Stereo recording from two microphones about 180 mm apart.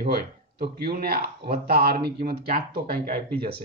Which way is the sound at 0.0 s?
55° right (ahead or behind).